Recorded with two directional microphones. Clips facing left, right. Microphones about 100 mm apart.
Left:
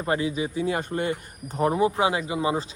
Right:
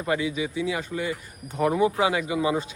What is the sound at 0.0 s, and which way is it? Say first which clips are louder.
A man's voice: left 1 dB; 35° left (ahead or behind).